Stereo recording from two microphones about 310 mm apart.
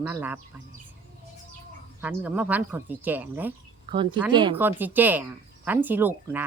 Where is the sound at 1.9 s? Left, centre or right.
Centre.